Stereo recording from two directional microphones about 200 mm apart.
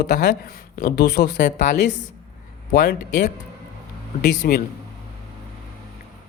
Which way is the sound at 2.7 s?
45° left (ahead or behind).